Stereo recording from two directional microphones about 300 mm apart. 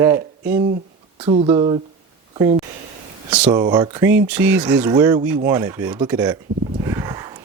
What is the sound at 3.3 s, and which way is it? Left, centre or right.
A man's voice, centre.